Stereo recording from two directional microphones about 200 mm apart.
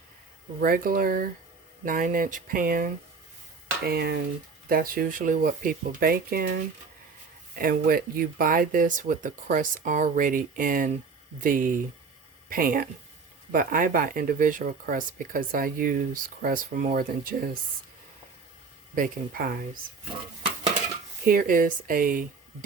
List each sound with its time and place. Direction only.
0.6 s speech: 45° right (ahead or behind)
7.5 s speech: 45° right (ahead or behind)
18.9 s speech: 45° right (ahead or behind)
21.2 s speech: 45° right (ahead or behind)